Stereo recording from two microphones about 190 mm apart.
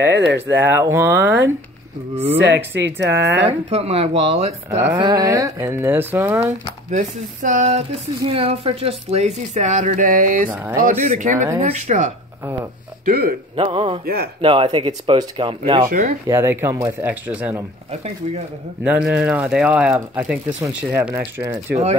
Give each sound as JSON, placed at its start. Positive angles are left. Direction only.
{"t": 0.6, "sound": "speech", "side_deg": -10}
{"t": 2.3, "sound": "speech", "side_deg": -65}
{"t": 3.4, "sound": "speech", "side_deg": -30}
{"t": 4.6, "sound": "speech", "side_deg": -15}
{"t": 6.9, "sound": "speech", "side_deg": -40}
{"t": 10.5, "sound": "speech", "side_deg": -10}
{"t": 10.8, "sound": "speech", "side_deg": -40}
{"t": 13.0, "sound": "speech", "side_deg": -50}
{"t": 13.6, "sound": "speech", "side_deg": -30}
{"t": 14.0, "sound": "speech", "side_deg": -55}
{"t": 14.4, "sound": "speech", "side_deg": -30}
{"t": 15.9, "sound": "speech", "side_deg": -40}
{"t": 16.3, "sound": "speech", "side_deg": -15}
{"t": 18.9, "sound": "speech", "side_deg": -5}